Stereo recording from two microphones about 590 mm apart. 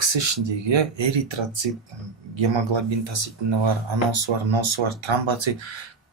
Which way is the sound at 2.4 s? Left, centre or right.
Right.